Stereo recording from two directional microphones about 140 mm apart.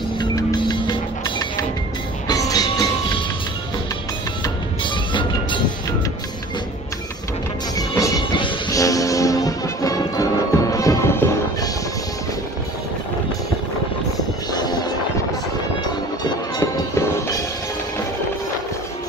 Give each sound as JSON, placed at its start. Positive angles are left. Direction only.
{"t": 0.2, "sound": "music", "side_deg": 30}
{"t": 2.2, "sound": "music", "side_deg": 25}
{"t": 4.8, "sound": "music", "side_deg": 35}
{"t": 8.2, "sound": "music", "side_deg": 35}
{"t": 14.5, "sound": "music", "side_deg": 30}
{"t": 16.9, "sound": "music", "side_deg": 20}